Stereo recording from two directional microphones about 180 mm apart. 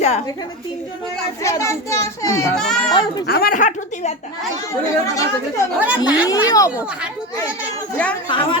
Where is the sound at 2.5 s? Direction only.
5° left (ahead or behind).